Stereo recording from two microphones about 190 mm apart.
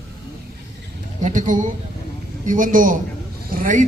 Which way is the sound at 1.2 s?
45° right (ahead or behind).